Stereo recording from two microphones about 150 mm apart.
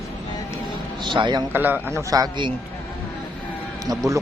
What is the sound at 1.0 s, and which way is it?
Speech, 30° right (ahead or behind).